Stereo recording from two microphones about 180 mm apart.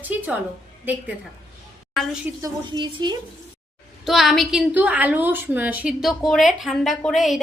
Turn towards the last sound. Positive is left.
turn(degrees=0)  # may be behind; listen again after turning